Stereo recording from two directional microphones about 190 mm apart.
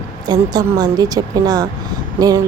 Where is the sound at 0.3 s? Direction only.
20° right (ahead or behind).